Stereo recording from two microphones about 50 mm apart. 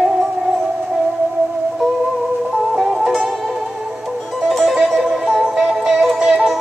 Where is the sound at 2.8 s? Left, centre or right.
Centre.